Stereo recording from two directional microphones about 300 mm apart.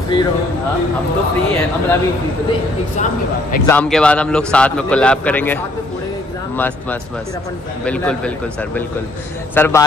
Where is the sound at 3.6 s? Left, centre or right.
Centre.